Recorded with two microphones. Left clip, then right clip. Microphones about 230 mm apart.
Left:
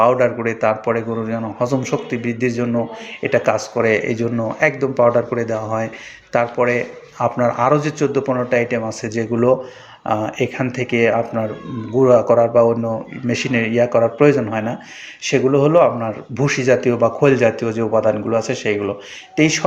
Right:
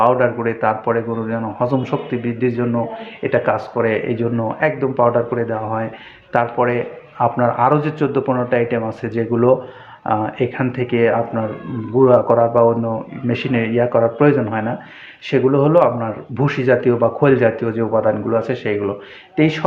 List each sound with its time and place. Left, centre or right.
0.0 s speech: centre